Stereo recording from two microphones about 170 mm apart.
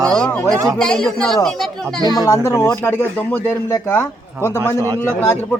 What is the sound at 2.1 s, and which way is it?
Speech, 20° left (ahead or behind).